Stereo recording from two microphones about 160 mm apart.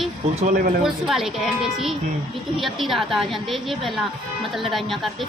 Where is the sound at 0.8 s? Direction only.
Centre (ahead or behind).